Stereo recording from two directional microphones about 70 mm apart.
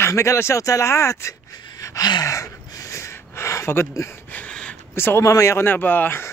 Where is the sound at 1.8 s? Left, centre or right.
Left.